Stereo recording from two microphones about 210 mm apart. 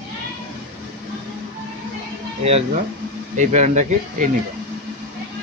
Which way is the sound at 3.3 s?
35° right (ahead or behind).